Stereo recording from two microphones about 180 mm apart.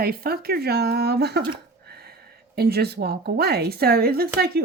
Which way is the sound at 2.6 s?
60° right (ahead or behind).